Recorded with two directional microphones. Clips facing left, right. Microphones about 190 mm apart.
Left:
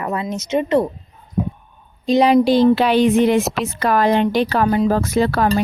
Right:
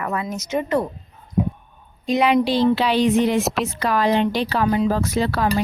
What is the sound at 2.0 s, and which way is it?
Speech, 35° left (ahead or behind).